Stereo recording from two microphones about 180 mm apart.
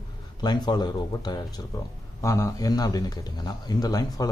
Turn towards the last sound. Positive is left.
turn(degrees=20)  # may be behind; listen again after turning